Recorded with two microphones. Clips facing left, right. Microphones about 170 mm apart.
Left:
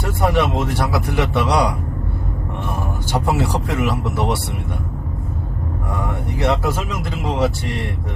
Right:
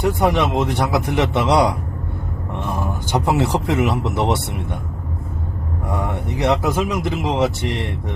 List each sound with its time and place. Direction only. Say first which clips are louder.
0.0 s a man's voice: right 1 dB; 20° right (ahead or behind)
3.1 s a man's voice: right 2 dB; 20° right (ahead or behind)
6.2 s a man's voice: right 1 dB; 20° right (ahead or behind)